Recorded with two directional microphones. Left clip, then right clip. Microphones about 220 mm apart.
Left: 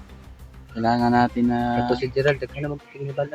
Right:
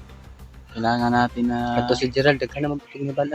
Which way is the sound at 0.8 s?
10° left (ahead or behind).